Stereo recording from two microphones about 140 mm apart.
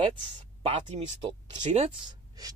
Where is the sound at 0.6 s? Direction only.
45° right (ahead or behind).